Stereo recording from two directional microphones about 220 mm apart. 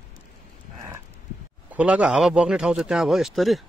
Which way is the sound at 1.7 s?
5° right (ahead or behind).